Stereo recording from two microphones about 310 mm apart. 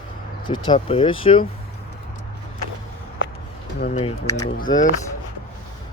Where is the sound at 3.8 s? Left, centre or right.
Left.